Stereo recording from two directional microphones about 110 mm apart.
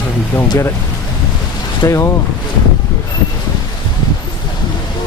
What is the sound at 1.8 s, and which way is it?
Speech, 25° left (ahead or behind).